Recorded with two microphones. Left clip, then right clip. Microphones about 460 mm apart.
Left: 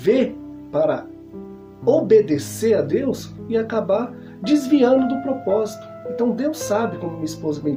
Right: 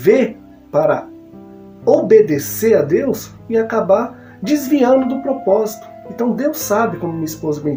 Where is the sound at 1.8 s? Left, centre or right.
Left.